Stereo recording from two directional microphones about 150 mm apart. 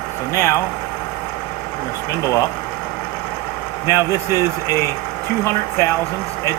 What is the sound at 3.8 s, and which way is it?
Speech, 25° left (ahead or behind).